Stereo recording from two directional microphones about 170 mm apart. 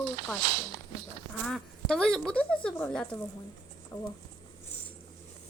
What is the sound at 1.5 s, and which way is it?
Speech, 5° left (ahead or behind).